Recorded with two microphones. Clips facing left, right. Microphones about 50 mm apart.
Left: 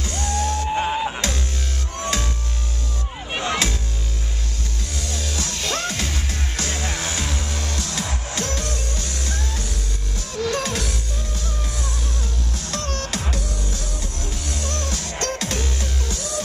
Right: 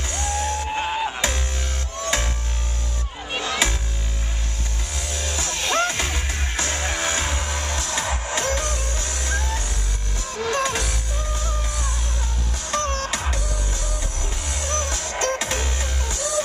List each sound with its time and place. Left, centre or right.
0.0 s music: centre
4.9 s music: centre
14.5 s music: centre